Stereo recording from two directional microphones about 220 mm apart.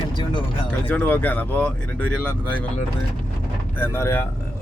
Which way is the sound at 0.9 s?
10° left (ahead or behind).